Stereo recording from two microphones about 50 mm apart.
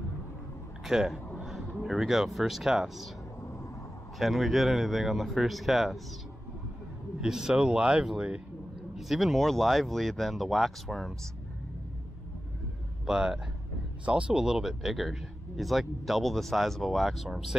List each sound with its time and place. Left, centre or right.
0.8 s a sound: centre
1.8 s speech: centre
4.2 s a man's voice: centre
7.2 s speech: centre
8.9 s a man's voice: centre
13.0 s speech: centre
14.0 s speech: right
14.3 s a man's voice: centre